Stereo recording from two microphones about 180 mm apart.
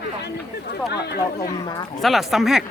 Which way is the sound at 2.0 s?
Centre (ahead or behind).